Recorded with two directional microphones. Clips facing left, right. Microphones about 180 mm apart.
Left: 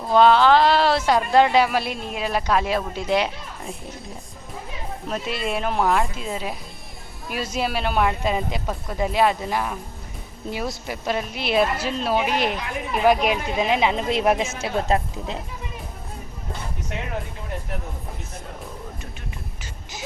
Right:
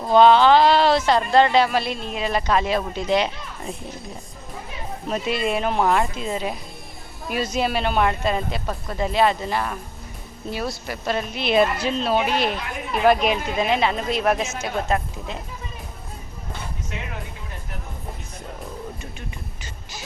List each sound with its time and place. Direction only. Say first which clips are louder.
0.1 s speech: right 1 dB; centre (ahead or behind)
5.0 s speech: right 4 dB; centre (ahead or behind); by 15.4 s 30° left (ahead or behind)